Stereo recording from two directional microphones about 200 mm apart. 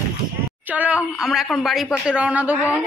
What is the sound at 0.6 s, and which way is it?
Speech, 10° right (ahead or behind).